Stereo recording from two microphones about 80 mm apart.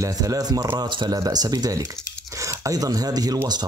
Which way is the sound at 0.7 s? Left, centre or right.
Right.